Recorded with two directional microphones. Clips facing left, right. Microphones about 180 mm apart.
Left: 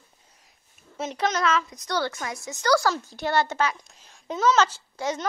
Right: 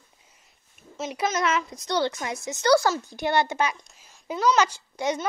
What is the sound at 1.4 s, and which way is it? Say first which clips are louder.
A woman's voice: left 1 dB; 25° right (ahead or behind).